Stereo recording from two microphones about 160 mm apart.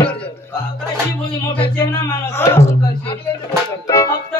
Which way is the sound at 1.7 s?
20° left (ahead or behind).